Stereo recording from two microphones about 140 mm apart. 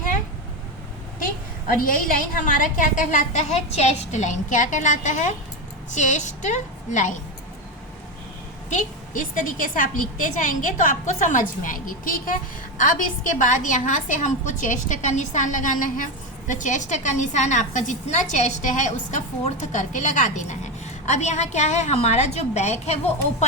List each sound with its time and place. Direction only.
1.6 s a woman's voice: 85° left; by 7.1 s 60° left (ahead or behind)
8.7 s a woman's voice: 70° left (ahead or behind)
12.8 s a woman's voice: 65° left (ahead or behind)